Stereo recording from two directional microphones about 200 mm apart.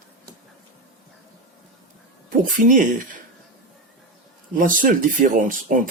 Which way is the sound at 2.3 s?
40° right (ahead or behind).